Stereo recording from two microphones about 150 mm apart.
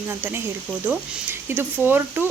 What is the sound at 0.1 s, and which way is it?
Speech, 15° right (ahead or behind).